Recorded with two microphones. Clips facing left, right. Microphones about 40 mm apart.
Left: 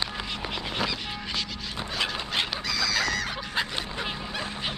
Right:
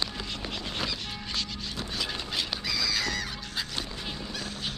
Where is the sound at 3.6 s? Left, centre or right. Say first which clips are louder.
Left 7 dB; left.